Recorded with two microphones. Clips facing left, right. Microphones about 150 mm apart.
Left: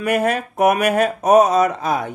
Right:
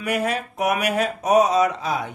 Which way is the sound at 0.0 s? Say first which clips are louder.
Left 5 dB; 50° left (ahead or behind).